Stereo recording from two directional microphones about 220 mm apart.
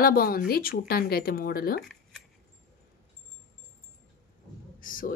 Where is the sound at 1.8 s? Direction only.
Centre (ahead or behind).